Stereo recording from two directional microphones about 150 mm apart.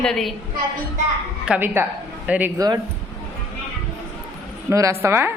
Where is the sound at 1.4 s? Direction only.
10° right (ahead or behind).